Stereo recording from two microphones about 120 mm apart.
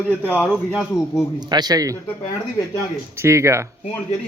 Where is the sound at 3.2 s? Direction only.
25° right (ahead or behind).